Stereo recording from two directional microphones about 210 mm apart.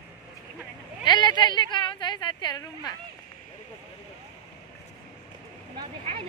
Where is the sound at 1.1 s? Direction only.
20° left (ahead or behind).